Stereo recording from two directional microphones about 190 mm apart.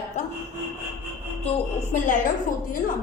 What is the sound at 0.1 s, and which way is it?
Rub, 35° left (ahead or behind).